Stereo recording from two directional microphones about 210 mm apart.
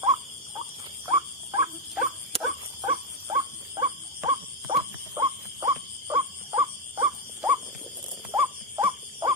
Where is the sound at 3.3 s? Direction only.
15° right (ahead or behind).